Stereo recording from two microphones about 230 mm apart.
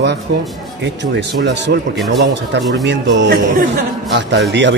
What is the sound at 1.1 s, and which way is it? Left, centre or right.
A man's voice, right.